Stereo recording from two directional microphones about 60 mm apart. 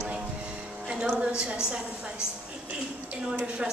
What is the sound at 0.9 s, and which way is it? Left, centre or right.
A woman's voice, centre.